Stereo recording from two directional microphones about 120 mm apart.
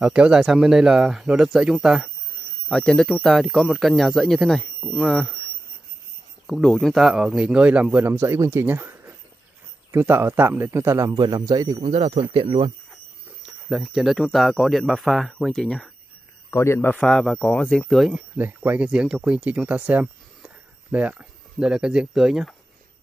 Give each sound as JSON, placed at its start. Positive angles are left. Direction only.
{"t": 0.0, "sound": "speech", "side_deg": -5}
{"t": 2.7, "sound": "speech", "side_deg": 5}
{"t": 6.4, "sound": "a man's voice", "side_deg": 5}
{"t": 11.8, "sound": "speech", "side_deg": -55}
{"t": 12.9, "sound": "a sound", "side_deg": -5}
{"t": 14.2, "sound": "speech", "side_deg": 5}
{"t": 16.4, "sound": "a man's voice", "side_deg": 20}
{"t": 17.0, "sound": "speech", "side_deg": 5}
{"t": 18.1, "sound": "speech", "side_deg": -15}